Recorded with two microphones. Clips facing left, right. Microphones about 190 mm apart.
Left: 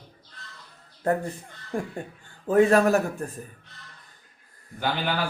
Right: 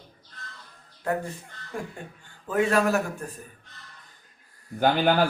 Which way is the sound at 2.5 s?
35° left (ahead or behind).